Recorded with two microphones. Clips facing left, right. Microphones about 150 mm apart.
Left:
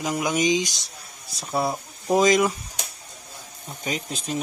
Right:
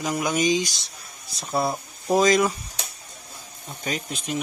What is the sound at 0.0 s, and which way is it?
Speech, 15° left (ahead or behind).